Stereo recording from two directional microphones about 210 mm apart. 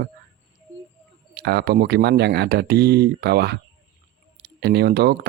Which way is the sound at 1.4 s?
50° right (ahead or behind).